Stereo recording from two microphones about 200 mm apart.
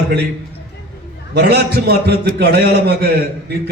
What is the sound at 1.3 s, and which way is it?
A man's voice, 55° right (ahead or behind).